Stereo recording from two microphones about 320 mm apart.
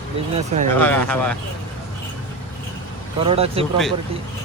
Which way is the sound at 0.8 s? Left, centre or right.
Centre.